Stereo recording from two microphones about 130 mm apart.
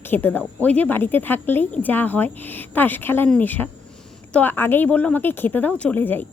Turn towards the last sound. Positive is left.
turn(degrees=15)  # may be behind; listen again after turning